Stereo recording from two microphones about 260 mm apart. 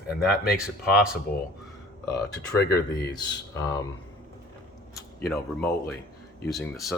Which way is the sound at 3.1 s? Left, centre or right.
Centre.